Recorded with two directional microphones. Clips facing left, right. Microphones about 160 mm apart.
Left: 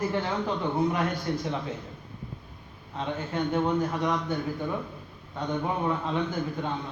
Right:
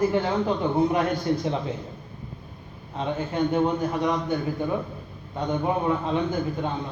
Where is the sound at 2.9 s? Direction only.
15° right (ahead or behind).